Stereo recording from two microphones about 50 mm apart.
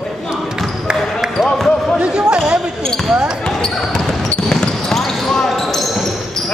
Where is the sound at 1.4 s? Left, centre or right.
Centre.